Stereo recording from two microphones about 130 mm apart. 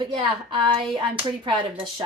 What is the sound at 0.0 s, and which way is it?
A woman's voice, 45° right (ahead or behind).